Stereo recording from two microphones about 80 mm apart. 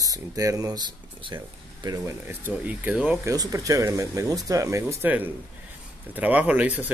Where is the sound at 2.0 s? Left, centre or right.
Right.